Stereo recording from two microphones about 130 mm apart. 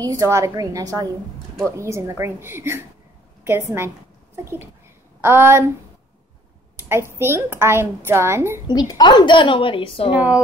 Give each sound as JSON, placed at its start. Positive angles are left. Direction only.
{"t": 0.0, "sound": "a woman's voice", "side_deg": -25}
{"t": 5.2, "sound": "a woman's voice", "side_deg": -15}
{"t": 6.8, "sound": "a woman's voice", "side_deg": -20}
{"t": 8.8, "sound": "a woman's voice", "side_deg": 35}
{"t": 10.1, "sound": "a woman's voice", "side_deg": -10}